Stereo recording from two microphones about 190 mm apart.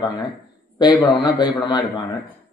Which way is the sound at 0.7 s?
20° left (ahead or behind).